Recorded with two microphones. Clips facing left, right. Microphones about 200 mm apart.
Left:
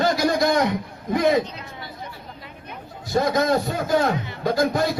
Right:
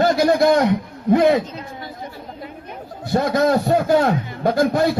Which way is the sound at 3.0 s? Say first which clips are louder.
Right 3 dB; 60° right (ahead or behind).